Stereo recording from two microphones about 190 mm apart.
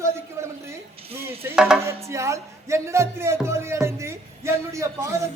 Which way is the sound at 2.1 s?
15° right (ahead or behind).